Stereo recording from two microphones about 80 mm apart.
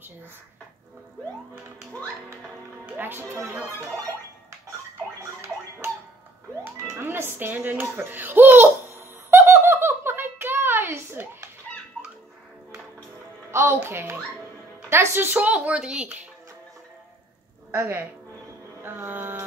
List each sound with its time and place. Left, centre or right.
2.9 s speech: right
6.6 s speech: right
8.9 s giggle: right
13.5 s music: right
13.8 s a child's voice: right; by 16.1 s centre
17.7 s a child's voice: right